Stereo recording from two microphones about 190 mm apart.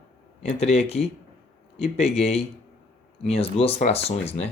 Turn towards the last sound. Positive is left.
turn(degrees=35)  # may be behind; listen again after turning